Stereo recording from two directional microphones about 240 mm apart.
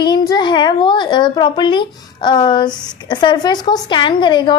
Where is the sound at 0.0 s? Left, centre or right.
Centre.